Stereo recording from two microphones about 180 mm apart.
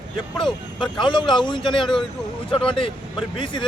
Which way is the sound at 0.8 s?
25° left (ahead or behind).